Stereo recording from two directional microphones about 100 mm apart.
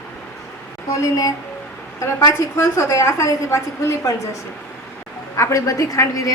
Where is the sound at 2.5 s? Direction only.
30° left (ahead or behind).